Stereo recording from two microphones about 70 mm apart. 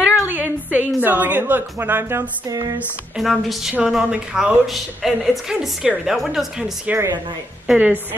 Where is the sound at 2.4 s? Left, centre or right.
Right.